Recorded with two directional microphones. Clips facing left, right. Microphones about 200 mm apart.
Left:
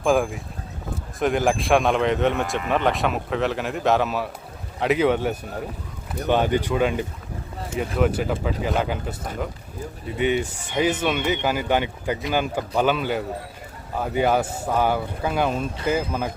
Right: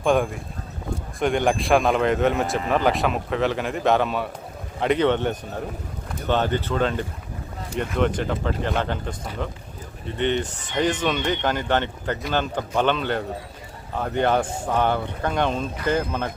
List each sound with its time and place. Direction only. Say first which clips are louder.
0.0 s speech: even; centre (ahead or behind)